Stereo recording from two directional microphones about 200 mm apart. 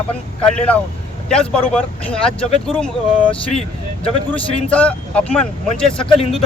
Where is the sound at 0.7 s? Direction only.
5° left (ahead or behind).